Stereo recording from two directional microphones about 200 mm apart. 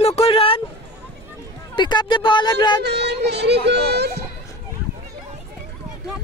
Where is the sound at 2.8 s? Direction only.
55° right (ahead or behind).